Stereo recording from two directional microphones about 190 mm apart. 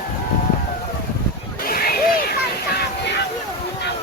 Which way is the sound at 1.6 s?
50° left (ahead or behind).